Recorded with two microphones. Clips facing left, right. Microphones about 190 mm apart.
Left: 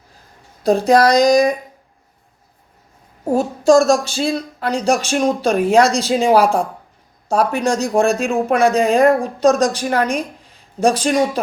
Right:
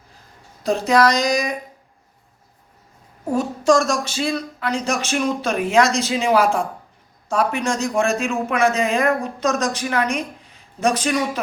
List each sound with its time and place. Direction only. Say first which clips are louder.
0.6 s speech: left 4 dB; 35° left (ahead or behind)
3.2 s speech: left 4 dB; 35° left (ahead or behind)